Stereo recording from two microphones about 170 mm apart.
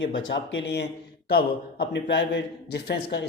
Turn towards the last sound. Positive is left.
turn(degrees=80)